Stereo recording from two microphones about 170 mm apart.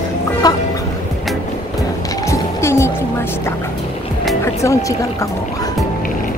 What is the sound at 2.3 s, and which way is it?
Music, 15° left (ahead or behind).